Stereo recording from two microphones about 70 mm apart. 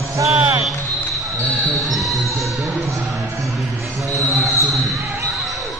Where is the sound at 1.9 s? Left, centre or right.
Centre.